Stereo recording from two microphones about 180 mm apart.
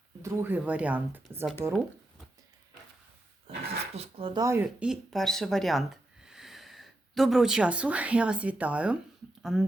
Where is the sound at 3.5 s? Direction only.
30° right (ahead or behind); by 4.9 s 15° right (ahead or behind).